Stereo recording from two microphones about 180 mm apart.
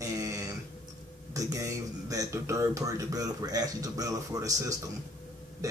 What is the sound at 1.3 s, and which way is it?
A man's voice, 20° right (ahead or behind).